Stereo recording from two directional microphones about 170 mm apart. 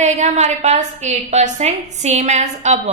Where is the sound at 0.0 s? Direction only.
40° right (ahead or behind).